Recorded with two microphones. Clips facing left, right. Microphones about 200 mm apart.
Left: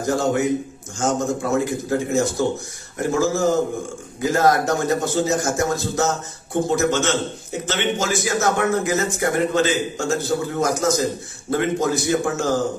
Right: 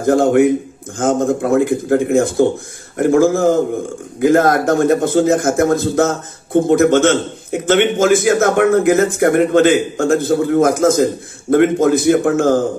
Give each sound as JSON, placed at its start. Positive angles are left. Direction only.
{"t": 0.0, "sound": "a man's voice", "side_deg": -55}